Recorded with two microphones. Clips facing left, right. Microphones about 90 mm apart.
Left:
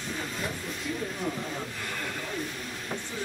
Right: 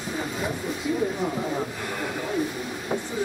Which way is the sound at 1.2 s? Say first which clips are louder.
Right 6 dB; 25° right (ahead or behind).